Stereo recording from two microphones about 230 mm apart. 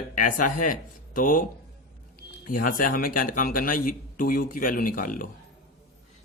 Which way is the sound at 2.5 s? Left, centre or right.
Left.